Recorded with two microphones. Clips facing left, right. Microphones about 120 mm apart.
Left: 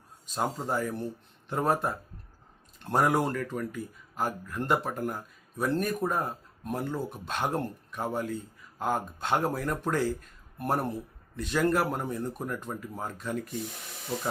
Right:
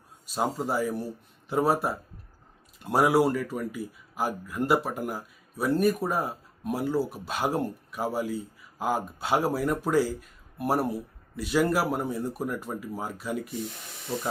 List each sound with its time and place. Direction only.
0.3 s speech: 5° right (ahead or behind)